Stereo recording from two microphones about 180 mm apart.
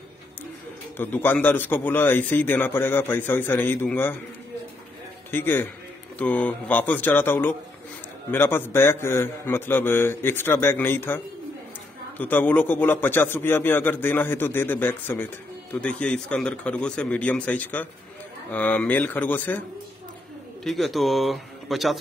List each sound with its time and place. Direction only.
0.9 s a man's voice: 10° left (ahead or behind)
5.3 s a man's voice: 10° left (ahead or behind)
12.2 s a man's voice: 10° left (ahead or behind)
20.6 s speech: centre (ahead or behind)